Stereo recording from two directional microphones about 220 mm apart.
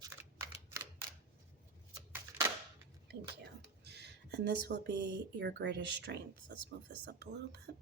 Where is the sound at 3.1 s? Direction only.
50° right (ahead or behind).